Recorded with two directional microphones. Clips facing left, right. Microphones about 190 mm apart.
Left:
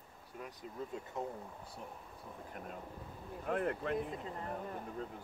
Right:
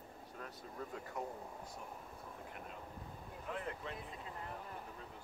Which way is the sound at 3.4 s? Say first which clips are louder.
Left 9 dB; 55° left (ahead or behind).